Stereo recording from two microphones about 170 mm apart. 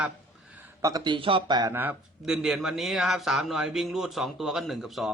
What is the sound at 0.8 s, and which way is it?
Speech, 25° right (ahead or behind).